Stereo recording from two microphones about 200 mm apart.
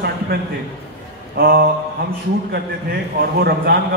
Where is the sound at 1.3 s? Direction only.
45° right (ahead or behind).